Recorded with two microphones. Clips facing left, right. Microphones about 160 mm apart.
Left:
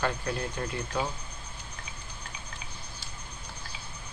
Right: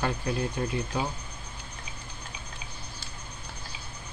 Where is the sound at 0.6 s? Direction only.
20° right (ahead or behind).